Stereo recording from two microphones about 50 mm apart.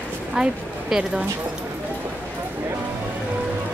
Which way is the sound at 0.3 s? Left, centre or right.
Centre.